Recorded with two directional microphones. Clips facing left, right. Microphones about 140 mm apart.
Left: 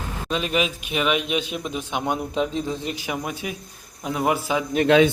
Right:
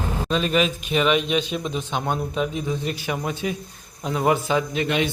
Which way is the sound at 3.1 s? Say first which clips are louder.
Right 4 dB; 10° left (ahead or behind).